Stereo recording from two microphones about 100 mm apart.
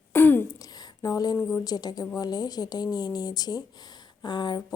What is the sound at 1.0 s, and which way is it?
A woman's voice, 40° left (ahead or behind).